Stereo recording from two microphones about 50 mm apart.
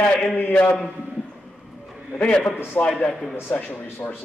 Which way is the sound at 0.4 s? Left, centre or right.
Left.